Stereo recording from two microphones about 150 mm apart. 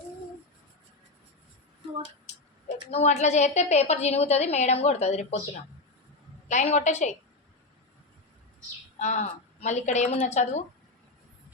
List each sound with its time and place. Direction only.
2.3 s a sound: 50° left (ahead or behind)
2.9 s a woman's voice: 50° left (ahead or behind)
6.5 s a woman's voice: 50° left (ahead or behind)
9.0 s a woman's voice: 50° left (ahead or behind)